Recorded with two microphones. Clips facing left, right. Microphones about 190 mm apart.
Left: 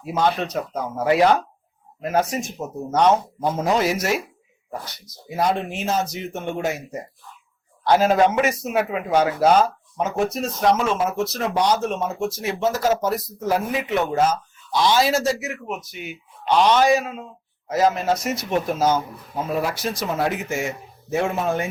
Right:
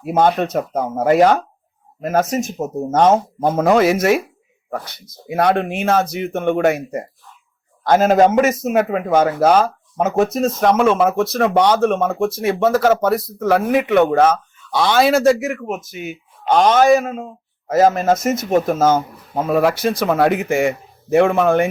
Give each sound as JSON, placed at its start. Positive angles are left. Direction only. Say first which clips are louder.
{"t": 0.0, "sound": "a man's voice", "louder": "right 6 dB", "side_deg": -55}
{"t": 7.9, "sound": "a man's voice", "louder": "right 4 dB", "side_deg": -50}